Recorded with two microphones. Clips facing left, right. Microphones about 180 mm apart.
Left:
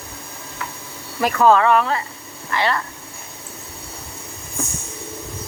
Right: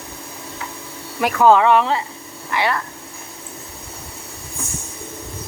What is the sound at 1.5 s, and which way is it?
Speech, 15° right (ahead or behind).